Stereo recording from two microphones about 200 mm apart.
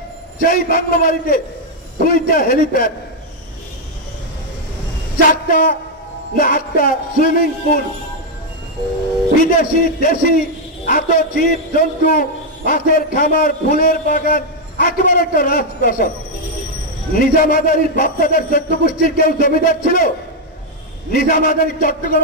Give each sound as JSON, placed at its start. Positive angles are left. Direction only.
{"t": 0.4, "sound": "a man's voice", "side_deg": 45}
{"t": 5.3, "sound": "a man's voice", "side_deg": 40}
{"t": 9.4, "sound": "a man's voice", "side_deg": 45}
{"t": 17.1, "sound": "a man's voice", "side_deg": 45}
{"t": 21.1, "sound": "a man's voice", "side_deg": 45}